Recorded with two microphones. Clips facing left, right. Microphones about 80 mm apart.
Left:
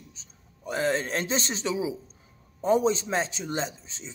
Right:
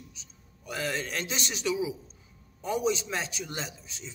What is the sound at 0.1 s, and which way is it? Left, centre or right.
A man's voice, left.